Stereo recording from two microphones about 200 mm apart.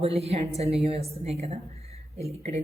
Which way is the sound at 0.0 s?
30° right (ahead or behind).